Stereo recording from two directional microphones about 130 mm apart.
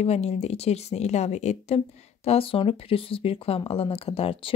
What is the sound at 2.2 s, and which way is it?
Speech, 45° left (ahead or behind).